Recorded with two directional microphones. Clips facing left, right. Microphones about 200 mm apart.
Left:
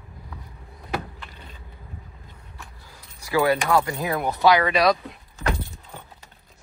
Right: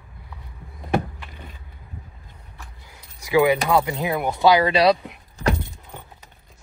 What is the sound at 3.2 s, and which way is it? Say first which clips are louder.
Speech: right 3 dB; 15° right (ahead or behind).